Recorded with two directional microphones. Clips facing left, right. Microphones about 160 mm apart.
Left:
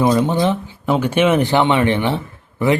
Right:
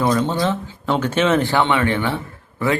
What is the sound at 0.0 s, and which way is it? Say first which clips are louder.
Speech: left 3 dB; 15° left (ahead or behind).